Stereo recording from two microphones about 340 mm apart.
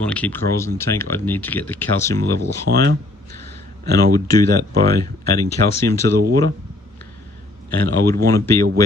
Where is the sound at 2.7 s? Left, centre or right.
Right.